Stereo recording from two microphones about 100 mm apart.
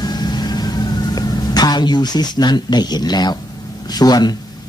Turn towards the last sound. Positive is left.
turn(degrees=40)  # may be behind; listen again after turning